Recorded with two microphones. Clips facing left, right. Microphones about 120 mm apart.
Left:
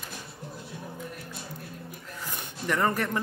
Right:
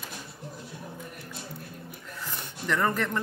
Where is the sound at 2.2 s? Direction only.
15° left (ahead or behind).